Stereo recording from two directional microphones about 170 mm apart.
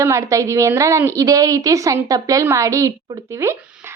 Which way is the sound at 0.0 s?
15° right (ahead or behind).